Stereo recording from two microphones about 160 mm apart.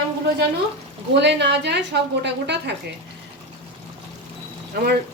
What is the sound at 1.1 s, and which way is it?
A woman's voice, 90° right.